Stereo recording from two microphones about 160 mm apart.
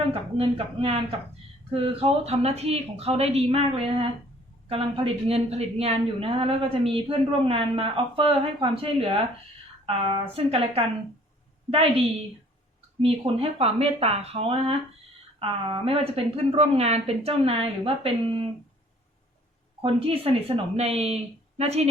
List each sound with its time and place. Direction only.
0.1 s a woman's voice: 35° right (ahead or behind)
19.8 s a woman's voice: 35° right (ahead or behind)